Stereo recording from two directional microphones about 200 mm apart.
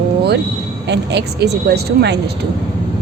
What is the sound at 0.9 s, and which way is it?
Speech, 55° right (ahead or behind).